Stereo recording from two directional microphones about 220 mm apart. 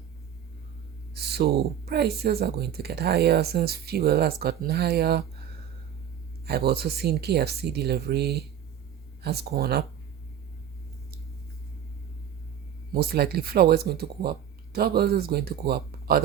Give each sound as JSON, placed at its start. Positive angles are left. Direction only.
{"t": 1.1, "sound": "speech", "side_deg": -45}
{"t": 6.4, "sound": "speech", "side_deg": -45}
{"t": 12.9, "sound": "speech", "side_deg": -45}